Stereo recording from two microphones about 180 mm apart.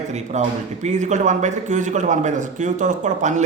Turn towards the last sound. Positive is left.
turn(degrees=-40)  # may be behind; listen again after turning